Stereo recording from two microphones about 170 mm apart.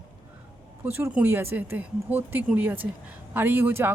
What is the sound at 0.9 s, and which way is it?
Speech, 15° right (ahead or behind).